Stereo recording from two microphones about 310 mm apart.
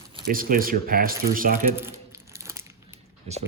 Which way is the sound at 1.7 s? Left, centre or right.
Centre.